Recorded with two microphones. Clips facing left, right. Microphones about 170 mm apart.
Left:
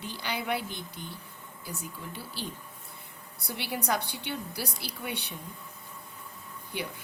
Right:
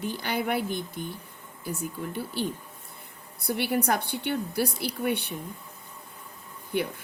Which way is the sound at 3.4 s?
55° right (ahead or behind).